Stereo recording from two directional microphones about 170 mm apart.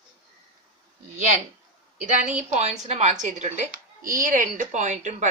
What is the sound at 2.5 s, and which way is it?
Speech, 40° right (ahead or behind).